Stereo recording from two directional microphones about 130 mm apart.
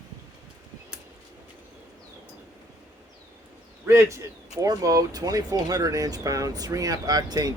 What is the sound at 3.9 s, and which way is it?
Speech, 20° right (ahead or behind).